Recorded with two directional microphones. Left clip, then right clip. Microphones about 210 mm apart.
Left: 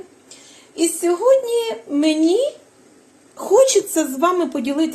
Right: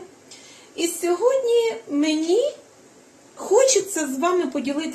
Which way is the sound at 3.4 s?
45° left (ahead or behind).